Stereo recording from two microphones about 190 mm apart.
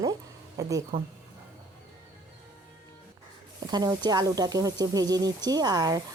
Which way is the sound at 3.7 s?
20° right (ahead or behind).